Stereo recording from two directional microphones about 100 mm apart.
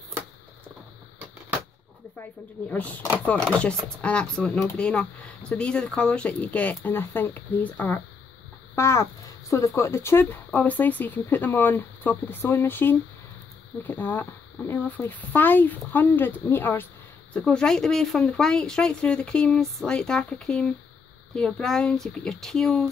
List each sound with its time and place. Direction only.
2.7 s speech: 15° left (ahead or behind)
8.7 s speech: 30° left (ahead or behind)
10.5 s speech: 15° left (ahead or behind)